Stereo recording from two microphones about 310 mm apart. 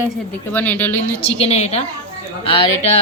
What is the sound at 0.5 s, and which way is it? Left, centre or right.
Speech, centre.